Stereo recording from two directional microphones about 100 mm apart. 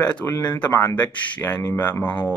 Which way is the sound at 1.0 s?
15° left (ahead or behind).